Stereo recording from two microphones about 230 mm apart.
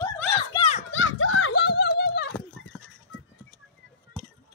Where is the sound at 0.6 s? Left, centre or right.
Left.